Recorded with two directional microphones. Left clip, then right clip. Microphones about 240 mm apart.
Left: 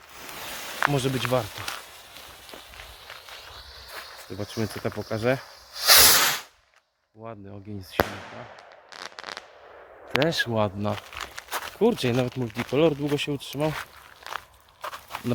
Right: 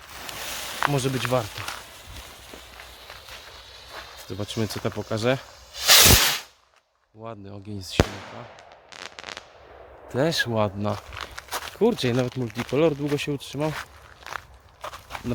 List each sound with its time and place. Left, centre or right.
0.2 s a sound: centre
0.9 s speech: centre
3.9 s speech: centre
5.7 s snake: centre
7.2 s speech: centre
8.9 s fireworks: centre
10.2 s speech: centre
11.1 s speech: centre
14.3 s walk: centre
14.8 s a sound: left